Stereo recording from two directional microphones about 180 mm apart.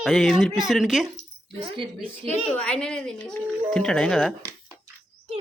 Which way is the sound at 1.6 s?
30° right (ahead or behind).